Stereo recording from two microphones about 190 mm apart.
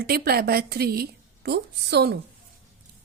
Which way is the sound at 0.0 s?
55° right (ahead or behind).